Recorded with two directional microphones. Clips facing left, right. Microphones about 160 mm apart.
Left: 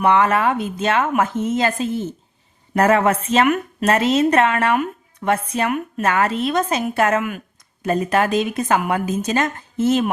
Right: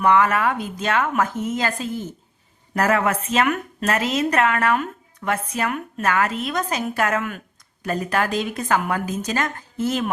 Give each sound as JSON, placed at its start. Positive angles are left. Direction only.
{"t": 0.0, "sound": "a woman's voice", "side_deg": 30}